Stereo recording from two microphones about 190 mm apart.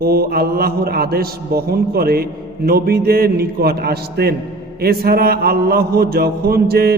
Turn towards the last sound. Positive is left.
turn(degrees=-55)  # may be behind; listen again after turning